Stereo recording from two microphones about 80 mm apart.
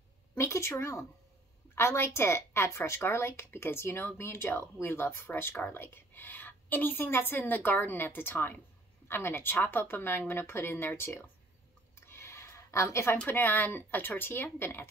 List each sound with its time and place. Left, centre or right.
0.4 s speech: left
12.1 s a sound: left
13.3 s speech: left